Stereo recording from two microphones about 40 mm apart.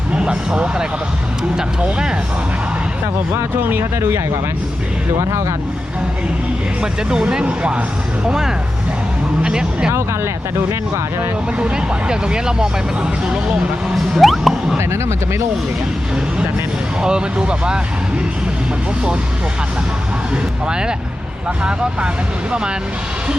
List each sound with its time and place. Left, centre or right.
0.1 s speech: right
3.3 s speech: right
7.1 s speech: centre
8.3 s speech: centre
11.6 s speech: right
13.9 s speech: centre
17.0 s speech: right
20.3 s speech: right